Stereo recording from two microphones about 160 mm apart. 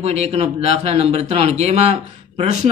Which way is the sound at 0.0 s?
40° right (ahead or behind).